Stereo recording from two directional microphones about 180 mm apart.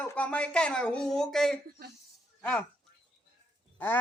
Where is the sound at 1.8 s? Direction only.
60° right (ahead or behind).